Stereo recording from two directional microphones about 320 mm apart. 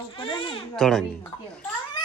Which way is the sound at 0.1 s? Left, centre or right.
Centre.